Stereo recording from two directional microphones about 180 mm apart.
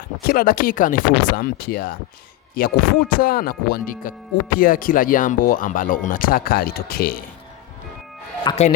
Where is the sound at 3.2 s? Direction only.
55° left (ahead or behind).